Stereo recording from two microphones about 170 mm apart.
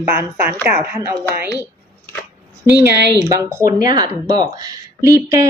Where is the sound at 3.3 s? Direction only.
15° right (ahead or behind).